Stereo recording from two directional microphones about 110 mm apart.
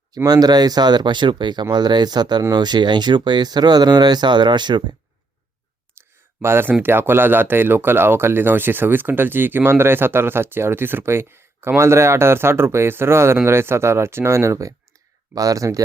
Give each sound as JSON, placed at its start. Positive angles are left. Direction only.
{"t": 0.3, "sound": "speech", "side_deg": -35}
{"t": 6.4, "sound": "speech", "side_deg": -20}